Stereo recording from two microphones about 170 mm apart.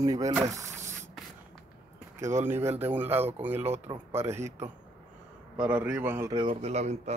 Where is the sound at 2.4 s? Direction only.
10° right (ahead or behind).